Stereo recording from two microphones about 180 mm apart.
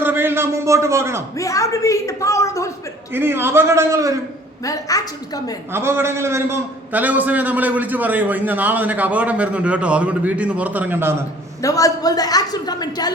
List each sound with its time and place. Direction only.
0.0 s speech: 10° right (ahead or behind)
1.4 s a woman's voice: 20° left (ahead or behind)
3.1 s a man's voice: 10° right (ahead or behind)
4.6 s a woman's voice: 20° left (ahead or behind)
5.7 s a man's voice: 15° right (ahead or behind)
11.6 s a woman's voice: 20° left (ahead or behind)